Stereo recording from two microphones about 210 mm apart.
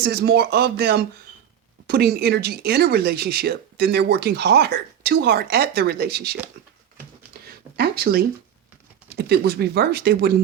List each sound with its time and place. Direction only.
0.0 s speech: 50° right (ahead or behind)
7.8 s speech: 45° right (ahead or behind)